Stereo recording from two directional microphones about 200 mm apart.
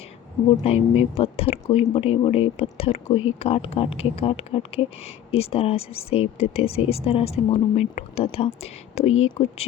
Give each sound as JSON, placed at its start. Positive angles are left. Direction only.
{"t": 0.6, "sound": "speech", "side_deg": 30}